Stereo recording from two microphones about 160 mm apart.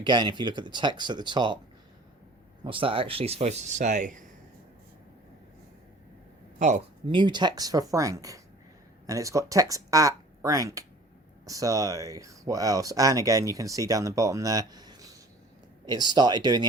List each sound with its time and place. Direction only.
0.0 s speech: 30° right (ahead or behind)
2.6 s speech: 35° right (ahead or behind); by 4.2 s 50° right (ahead or behind)
6.6 s speech: 50° right (ahead or behind)
7.1 s speech: 30° right (ahead or behind)